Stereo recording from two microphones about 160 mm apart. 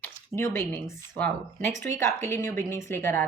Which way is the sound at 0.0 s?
15° left (ahead or behind).